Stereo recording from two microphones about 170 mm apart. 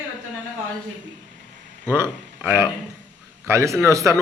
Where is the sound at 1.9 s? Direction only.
15° right (ahead or behind).